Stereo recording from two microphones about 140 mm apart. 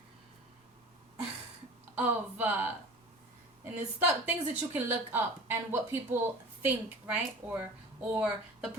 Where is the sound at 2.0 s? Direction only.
15° right (ahead or behind).